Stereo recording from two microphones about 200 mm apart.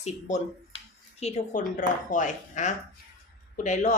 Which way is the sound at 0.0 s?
35° left (ahead or behind).